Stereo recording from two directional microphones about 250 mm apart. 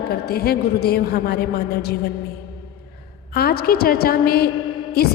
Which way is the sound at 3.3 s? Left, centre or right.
Left.